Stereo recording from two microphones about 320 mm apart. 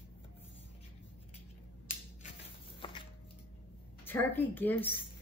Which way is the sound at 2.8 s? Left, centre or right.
Centre.